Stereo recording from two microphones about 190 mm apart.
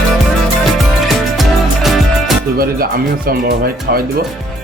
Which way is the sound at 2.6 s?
50° right (ahead or behind).